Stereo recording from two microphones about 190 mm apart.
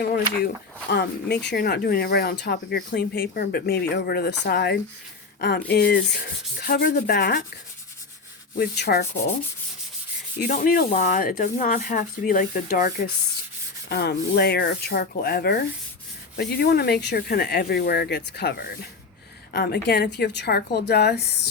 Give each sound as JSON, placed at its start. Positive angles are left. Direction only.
{"t": 0.0, "sound": "speech", "side_deg": 55}
{"t": 8.5, "sound": "speech", "side_deg": 55}
{"t": 10.4, "sound": "speech", "side_deg": 45}
{"t": 13.9, "sound": "speech", "side_deg": 60}